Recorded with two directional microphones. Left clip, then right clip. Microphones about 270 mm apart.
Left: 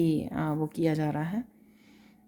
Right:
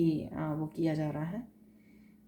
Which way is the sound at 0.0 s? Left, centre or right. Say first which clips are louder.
Left 3 dB; left.